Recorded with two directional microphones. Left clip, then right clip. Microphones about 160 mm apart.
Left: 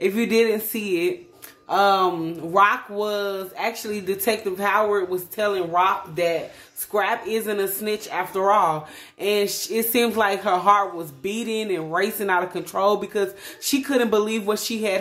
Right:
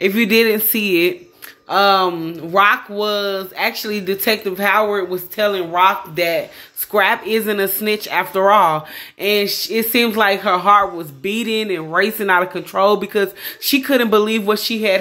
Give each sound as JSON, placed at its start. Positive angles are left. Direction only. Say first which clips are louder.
{"t": 0.0, "sound": "speech", "louder": "right 5 dB", "side_deg": -25}
{"t": 1.7, "sound": "speech", "louder": "right 4 dB", "side_deg": -20}